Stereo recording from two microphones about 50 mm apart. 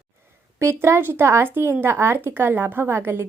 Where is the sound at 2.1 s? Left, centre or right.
Right.